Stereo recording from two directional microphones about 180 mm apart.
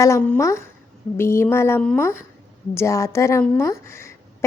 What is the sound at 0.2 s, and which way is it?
A woman's voice, 10° left (ahead or behind).